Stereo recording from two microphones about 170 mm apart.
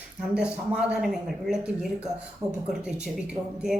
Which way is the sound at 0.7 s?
5° right (ahead or behind).